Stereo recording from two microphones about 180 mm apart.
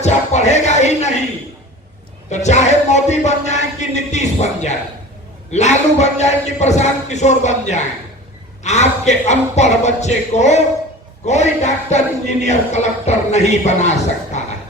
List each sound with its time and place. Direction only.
0.0 s music: 40° left (ahead or behind)
2.3 s chant: 40° left (ahead or behind)